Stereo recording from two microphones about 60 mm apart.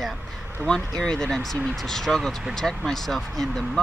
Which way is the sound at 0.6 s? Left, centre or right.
Right.